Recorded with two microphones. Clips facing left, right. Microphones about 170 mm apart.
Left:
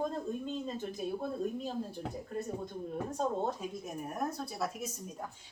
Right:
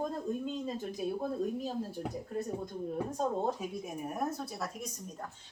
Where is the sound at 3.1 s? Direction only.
10° right (ahead or behind).